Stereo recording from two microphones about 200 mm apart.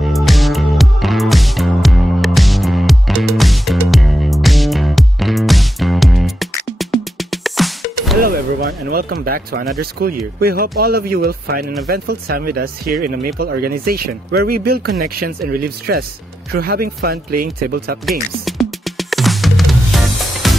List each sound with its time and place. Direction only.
0.0 s music: centre (ahead or behind)
8.2 s a sound: 45° right (ahead or behind)
9.8 s speech: 50° right (ahead or behind)
18.4 s music: centre (ahead or behind)